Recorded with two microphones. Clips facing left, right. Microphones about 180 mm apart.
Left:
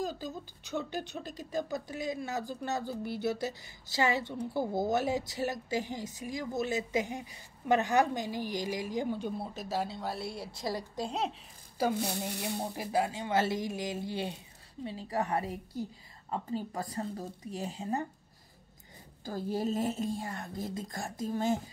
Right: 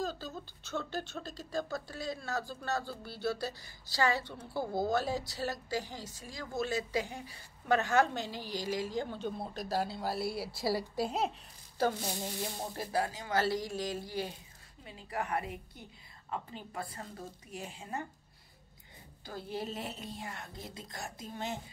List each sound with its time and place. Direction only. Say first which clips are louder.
0.0 s speech: left 2 dB; 15° left (ahead or behind); by 11.3 s 5° right (ahead or behind)
11.8 s a woman's voice: left 2 dB; 15° left (ahead or behind); by 18.0 s 35° left (ahead or behind)
19.2 s a woman's voice: left 7 dB; 45° left (ahead or behind)